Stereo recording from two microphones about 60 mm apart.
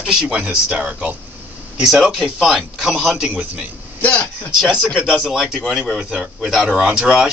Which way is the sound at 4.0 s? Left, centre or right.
Left.